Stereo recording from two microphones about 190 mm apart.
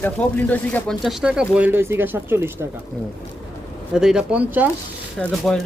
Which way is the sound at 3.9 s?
5° right (ahead or behind).